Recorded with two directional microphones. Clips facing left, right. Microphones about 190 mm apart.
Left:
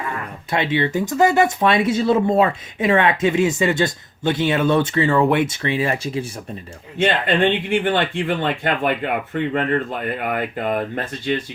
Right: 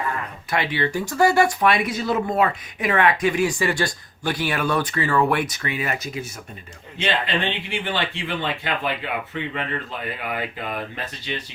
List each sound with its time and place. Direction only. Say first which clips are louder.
0.5 s speech: left 4 dB; 25° left (ahead or behind)
7.0 s speech: left 7 dB; 50° left (ahead or behind)